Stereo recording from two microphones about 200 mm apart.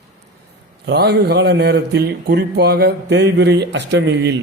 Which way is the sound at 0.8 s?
55° right (ahead or behind).